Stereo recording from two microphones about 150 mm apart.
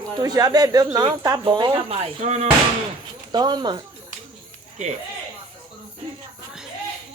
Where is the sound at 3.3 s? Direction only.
30° right (ahead or behind).